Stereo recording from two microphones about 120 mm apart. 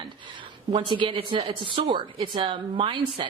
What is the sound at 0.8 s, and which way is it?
A woman's voice, 45° right (ahead or behind).